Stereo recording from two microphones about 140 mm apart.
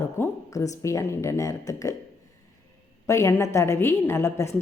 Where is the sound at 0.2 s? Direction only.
25° left (ahead or behind).